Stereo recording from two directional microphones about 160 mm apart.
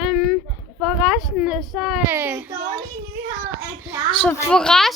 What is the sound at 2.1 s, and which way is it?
Speech, 10° right (ahead or behind).